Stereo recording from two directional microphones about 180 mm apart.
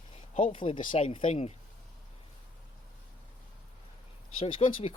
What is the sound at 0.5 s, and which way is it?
Speech, 30° left (ahead or behind).